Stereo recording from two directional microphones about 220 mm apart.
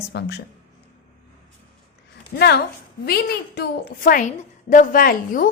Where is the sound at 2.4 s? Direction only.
50° left (ahead or behind).